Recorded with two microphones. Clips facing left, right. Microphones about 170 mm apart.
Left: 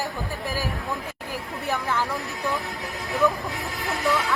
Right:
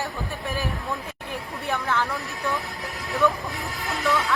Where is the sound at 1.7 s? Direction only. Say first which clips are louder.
Even; 10° left (ahead or behind).